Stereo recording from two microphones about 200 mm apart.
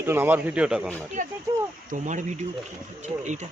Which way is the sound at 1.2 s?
40° right (ahead or behind).